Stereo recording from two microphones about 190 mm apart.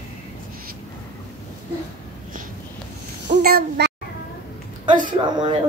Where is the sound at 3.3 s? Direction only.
55° right (ahead or behind).